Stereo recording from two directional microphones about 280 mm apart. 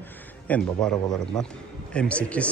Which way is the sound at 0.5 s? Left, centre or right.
Centre.